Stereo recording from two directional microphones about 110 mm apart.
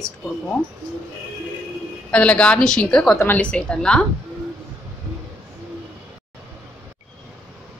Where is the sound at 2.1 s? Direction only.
10° left (ahead or behind).